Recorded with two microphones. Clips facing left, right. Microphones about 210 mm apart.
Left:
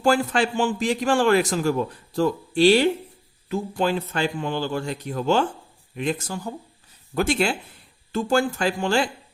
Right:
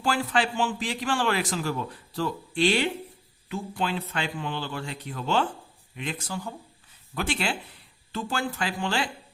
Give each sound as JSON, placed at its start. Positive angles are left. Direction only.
{"t": 0.0, "sound": "a man's voice", "side_deg": 45}